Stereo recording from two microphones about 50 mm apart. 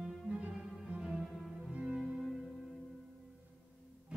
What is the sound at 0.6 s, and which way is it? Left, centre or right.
Cello, centre.